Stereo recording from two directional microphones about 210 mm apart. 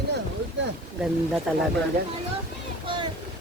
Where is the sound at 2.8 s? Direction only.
25° right (ahead or behind).